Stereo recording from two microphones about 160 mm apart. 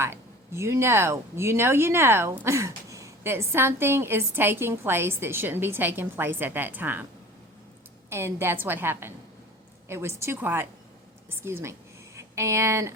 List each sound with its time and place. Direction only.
0.0 s a woman's voice: 15° right (ahead or behind)
8.1 s a woman's voice: 15° right (ahead or behind)